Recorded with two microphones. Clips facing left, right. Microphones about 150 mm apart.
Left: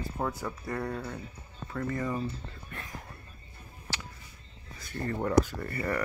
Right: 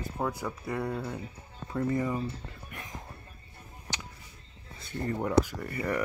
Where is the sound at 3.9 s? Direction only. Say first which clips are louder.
Even; 20° right (ahead or behind).